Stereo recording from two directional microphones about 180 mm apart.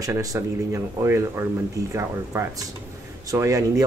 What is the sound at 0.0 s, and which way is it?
A man's voice, 20° right (ahead or behind).